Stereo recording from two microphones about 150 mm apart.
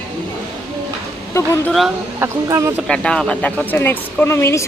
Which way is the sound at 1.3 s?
20° left (ahead or behind).